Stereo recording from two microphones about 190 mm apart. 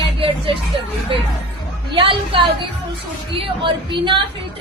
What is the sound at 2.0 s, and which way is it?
Speech, 25° right (ahead or behind).